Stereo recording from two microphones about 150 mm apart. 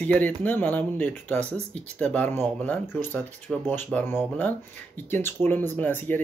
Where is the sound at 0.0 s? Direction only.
10° left (ahead or behind).